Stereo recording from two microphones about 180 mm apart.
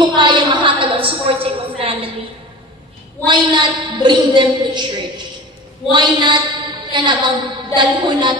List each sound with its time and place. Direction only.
0.0 s a sound: 25° right (ahead or behind)
3.3 s a woman's voice: 25° right (ahead or behind)
5.9 s a woman's voice: 25° right (ahead or behind)